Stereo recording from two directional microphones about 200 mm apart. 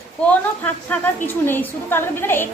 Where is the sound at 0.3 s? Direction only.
5° left (ahead or behind).